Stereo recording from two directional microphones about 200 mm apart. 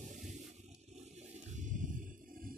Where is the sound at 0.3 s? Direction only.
35° right (ahead or behind).